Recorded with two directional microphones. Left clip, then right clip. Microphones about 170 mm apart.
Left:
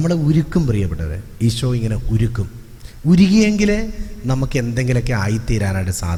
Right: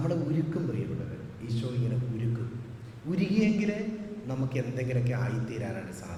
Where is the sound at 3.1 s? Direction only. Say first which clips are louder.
Left 13 dB; 45° left (ahead or behind).